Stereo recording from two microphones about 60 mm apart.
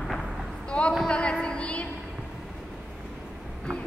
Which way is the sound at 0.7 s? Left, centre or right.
Centre.